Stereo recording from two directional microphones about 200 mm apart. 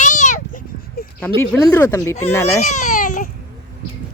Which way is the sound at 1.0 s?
50° left (ahead or behind).